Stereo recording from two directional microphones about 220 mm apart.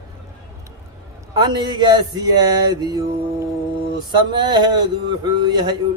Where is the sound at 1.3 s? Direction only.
20° right (ahead or behind).